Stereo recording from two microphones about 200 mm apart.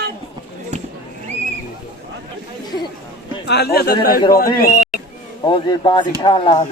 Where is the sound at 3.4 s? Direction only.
55° left (ahead or behind).